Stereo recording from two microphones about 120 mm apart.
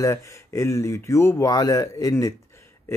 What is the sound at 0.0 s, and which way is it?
Speech, 25° left (ahead or behind).